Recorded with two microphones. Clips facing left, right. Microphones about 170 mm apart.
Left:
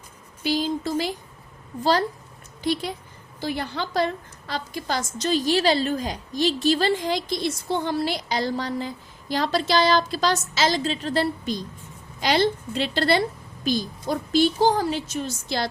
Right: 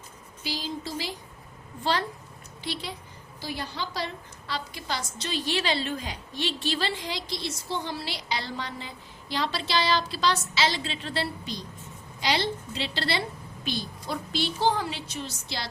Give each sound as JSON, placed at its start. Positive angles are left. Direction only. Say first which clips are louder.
{"t": 0.4, "sound": "a woman's voice", "louder": "left 9 dB", "side_deg": 55}
{"t": 1.8, "sound": "speech", "louder": "left 6 dB", "side_deg": 40}
{"t": 3.4, "sound": "a woman's voice", "louder": "left 6 dB", "side_deg": 55}